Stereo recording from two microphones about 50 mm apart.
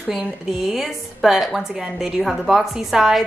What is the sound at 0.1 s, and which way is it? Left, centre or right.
A woman's voice, centre.